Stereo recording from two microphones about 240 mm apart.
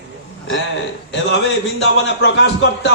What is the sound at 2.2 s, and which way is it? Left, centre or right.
Speech, left.